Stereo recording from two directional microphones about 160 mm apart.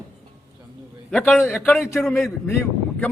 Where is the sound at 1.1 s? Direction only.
5° left (ahead or behind).